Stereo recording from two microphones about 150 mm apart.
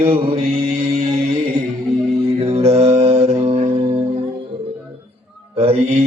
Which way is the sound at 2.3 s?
45° right (ahead or behind).